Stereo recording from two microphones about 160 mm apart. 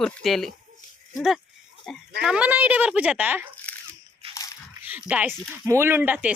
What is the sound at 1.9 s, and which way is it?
Speech, centre (ahead or behind).